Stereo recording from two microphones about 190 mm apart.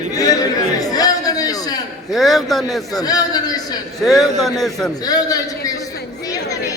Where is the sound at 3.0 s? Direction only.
20° left (ahead or behind).